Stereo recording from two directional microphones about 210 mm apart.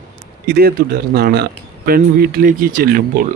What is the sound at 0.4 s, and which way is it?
Speech, 50° right (ahead or behind).